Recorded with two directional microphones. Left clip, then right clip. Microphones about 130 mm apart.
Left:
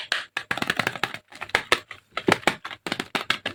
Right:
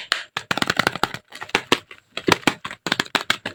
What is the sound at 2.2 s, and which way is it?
Computer keyboard, 45° right (ahead or behind).